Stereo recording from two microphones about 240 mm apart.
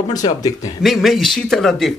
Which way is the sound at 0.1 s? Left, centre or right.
Centre.